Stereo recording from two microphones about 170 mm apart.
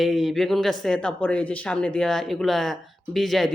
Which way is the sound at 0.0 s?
Centre (ahead or behind).